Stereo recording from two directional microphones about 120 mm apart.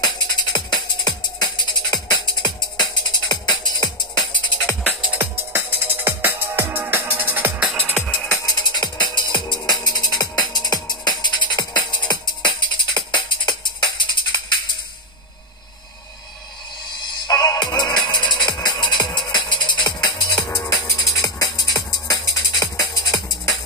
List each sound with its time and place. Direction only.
0.0 s music: 35° left (ahead or behind)
4.8 s music: 10° right (ahead or behind)
8.0 s music: 15° left (ahead or behind)
8.4 s music: 30° left (ahead or behind)
17.0 s music: 35° left (ahead or behind)